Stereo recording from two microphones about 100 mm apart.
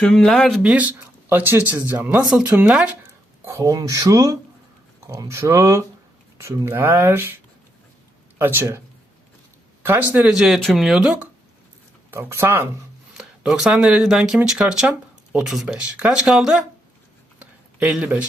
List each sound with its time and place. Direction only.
0.0 s speech: 5° left (ahead or behind)
0.6 s speech: 15° right (ahead or behind)
3.4 s speech: 30° right (ahead or behind)
9.8 s speech: 20° right (ahead or behind)
10.3 s speech: 5° right (ahead or behind)
12.1 s speech: 20° right (ahead or behind)
13.1 s speech: 5° right (ahead or behind)
17.4 s a sound: 15° right (ahead or behind)
18.0 s speech: 15° right (ahead or behind)